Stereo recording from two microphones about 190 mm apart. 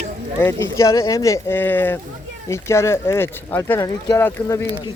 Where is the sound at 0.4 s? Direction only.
15° left (ahead or behind).